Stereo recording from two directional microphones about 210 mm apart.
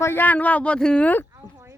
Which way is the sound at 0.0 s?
10° left (ahead or behind).